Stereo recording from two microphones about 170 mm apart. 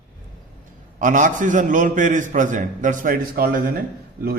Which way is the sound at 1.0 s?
50° right (ahead or behind).